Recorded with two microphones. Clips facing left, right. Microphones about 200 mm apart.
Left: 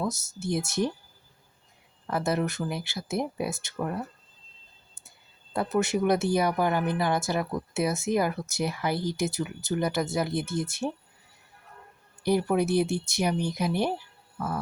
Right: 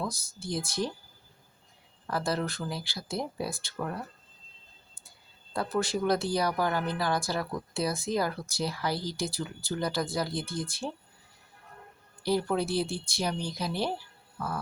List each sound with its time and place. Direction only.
0.0 s speech: 25° left (ahead or behind)
2.0 s speech: 20° left (ahead or behind)
5.5 s speech: 20° left (ahead or behind)
12.2 s speech: 15° left (ahead or behind)
14.3 s music: 20° left (ahead or behind)